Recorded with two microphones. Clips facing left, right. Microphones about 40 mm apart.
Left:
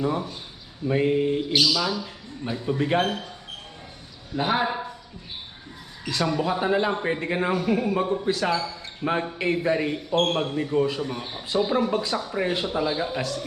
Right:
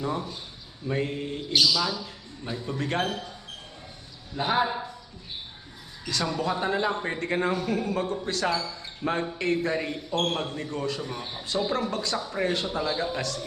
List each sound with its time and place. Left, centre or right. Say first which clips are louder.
0.0 s a man's voice: left 4 dB; centre
4.4 s a man's voice: left 1 dB; centre
6.1 s a man's voice: left 3 dB; centre